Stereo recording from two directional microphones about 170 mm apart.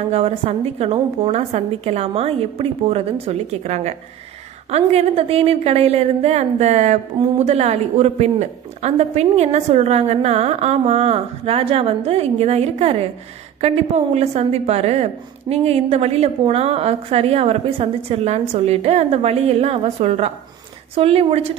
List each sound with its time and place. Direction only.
0.1 s speech: 35° right (ahead or behind)